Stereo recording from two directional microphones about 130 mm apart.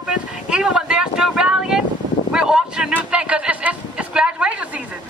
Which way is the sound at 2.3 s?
5° right (ahead or behind).